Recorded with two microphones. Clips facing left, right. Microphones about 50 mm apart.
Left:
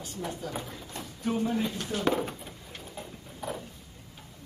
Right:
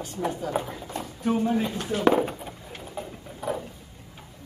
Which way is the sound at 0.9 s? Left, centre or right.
Centre.